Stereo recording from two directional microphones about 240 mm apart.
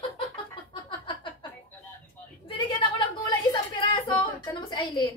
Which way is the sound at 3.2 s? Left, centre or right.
Centre.